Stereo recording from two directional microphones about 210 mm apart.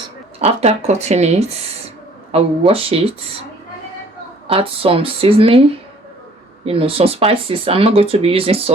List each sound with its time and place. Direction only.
0.3 s speech: 30° right (ahead or behind)
4.4 s speech: 25° right (ahead or behind)
6.7 s speech: 25° right (ahead or behind)